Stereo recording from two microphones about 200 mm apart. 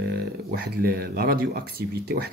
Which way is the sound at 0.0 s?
55° right (ahead or behind).